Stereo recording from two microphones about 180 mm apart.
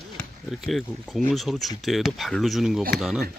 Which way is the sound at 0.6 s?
Centre (ahead or behind).